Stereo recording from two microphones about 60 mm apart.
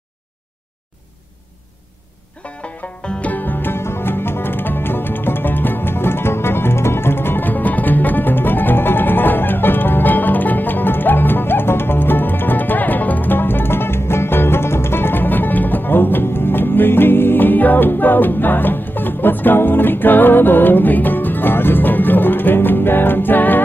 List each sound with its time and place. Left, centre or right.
2.4 s music: centre